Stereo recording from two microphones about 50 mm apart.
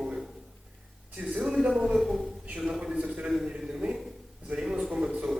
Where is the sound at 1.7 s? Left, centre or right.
Centre.